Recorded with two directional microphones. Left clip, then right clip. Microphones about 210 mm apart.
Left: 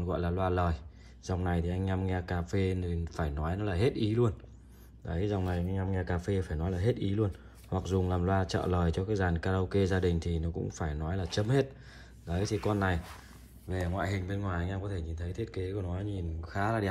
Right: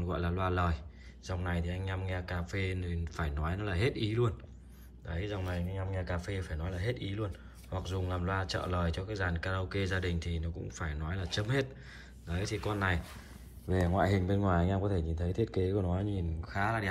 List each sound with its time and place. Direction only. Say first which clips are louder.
0.0 s speech: left 3 dB; 20° left (ahead or behind)
1.2 s speech: left 4 dB; 30° left (ahead or behind)
13.7 s speech: right 4 dB; centre (ahead or behind)
16.3 s speech: left 1 dB; 20° left (ahead or behind)